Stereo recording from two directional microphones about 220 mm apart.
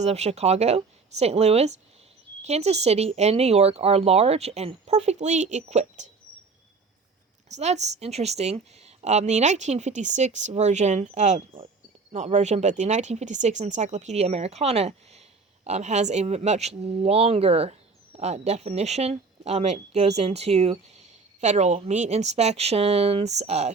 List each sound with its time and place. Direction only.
0.0 s speech: 30° right (ahead or behind)
7.4 s a woman's voice: 30° right (ahead or behind)